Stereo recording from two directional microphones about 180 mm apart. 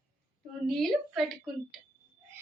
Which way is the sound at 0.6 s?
Centre (ahead or behind).